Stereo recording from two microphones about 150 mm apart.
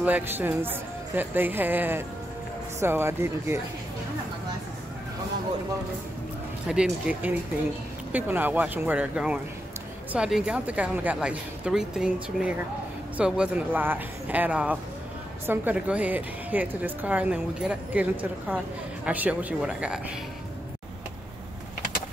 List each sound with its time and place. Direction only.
0.0 s a woman's voice: 10° right (ahead or behind)
6.7 s a woman's voice: 10° right (ahead or behind)
19.0 s a woman's voice: 10° right (ahead or behind)